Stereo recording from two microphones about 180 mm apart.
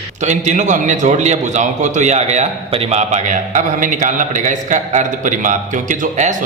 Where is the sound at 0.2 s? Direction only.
40° right (ahead or behind).